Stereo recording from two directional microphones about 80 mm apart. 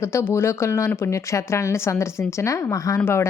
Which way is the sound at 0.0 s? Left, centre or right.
Left.